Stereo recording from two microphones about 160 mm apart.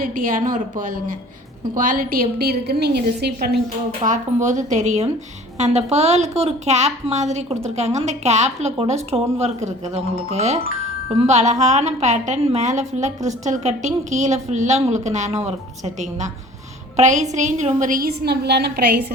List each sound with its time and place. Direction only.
0.0 s a woman's voice: 60° right (ahead or behind); by 3.5 s 90° right
4.0 s a woman's voice: 50° right (ahead or behind)
17.0 s a woman's voice: 50° right (ahead or behind); by 19.0 s 90° right